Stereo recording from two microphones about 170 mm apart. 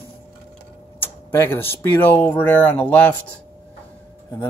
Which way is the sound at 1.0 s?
10° left (ahead or behind).